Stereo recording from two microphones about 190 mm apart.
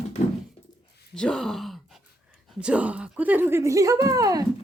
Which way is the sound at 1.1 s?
5° left (ahead or behind).